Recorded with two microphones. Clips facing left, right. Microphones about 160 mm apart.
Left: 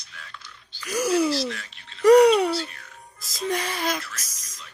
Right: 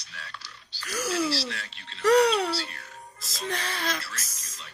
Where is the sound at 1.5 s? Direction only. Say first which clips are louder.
Even; 30° right (ahead or behind).